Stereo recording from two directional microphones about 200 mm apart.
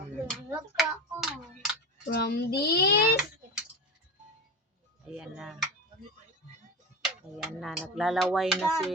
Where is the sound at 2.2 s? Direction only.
50° left (ahead or behind).